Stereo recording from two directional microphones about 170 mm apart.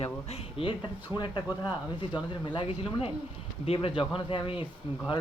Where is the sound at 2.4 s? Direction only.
30° left (ahead or behind).